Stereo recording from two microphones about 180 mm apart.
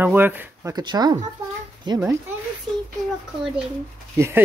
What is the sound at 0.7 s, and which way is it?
Speech, 25° right (ahead or behind).